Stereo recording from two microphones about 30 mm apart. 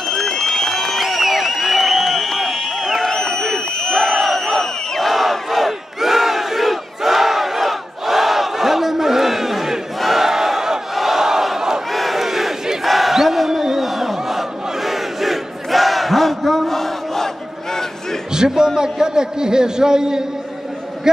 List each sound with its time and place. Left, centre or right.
0.1 s run: centre
1.0 s a sound: centre
2.8 s crowd: centre
3.1 s a sound: centre
3.7 s crowd: left
4.1 s crowd: centre
7.0 s battle cry: centre
11.9 s crowd: centre
12.8 s battle cry: centre
18.3 s a sound: right